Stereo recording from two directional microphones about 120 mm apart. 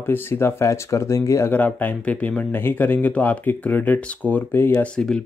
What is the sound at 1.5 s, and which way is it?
Speech, 10° left (ahead or behind).